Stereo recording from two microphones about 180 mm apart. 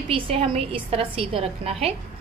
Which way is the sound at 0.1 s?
30° right (ahead or behind).